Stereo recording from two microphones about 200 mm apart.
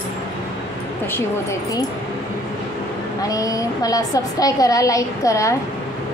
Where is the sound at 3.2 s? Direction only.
15° left (ahead or behind).